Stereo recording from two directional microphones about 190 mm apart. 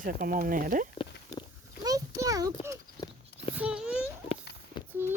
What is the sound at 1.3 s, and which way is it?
Pig, 20° left (ahead or behind).